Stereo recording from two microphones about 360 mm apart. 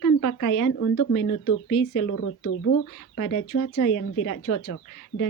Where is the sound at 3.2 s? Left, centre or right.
Left.